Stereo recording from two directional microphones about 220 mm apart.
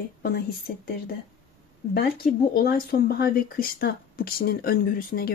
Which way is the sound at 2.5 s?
45° left (ahead or behind).